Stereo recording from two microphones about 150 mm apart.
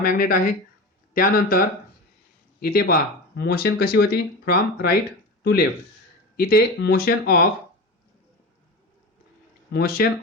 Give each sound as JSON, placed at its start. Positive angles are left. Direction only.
{"t": 0.0, "sound": "speech", "side_deg": 70}
{"t": 2.6, "sound": "speech", "side_deg": 90}
{"t": 9.7, "sound": "speech", "side_deg": 90}